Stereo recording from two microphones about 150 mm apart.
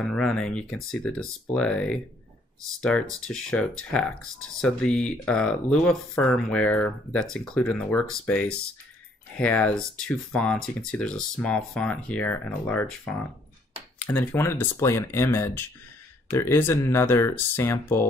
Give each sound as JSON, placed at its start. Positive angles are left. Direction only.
{"t": 0.1, "sound": "speech", "side_deg": 5}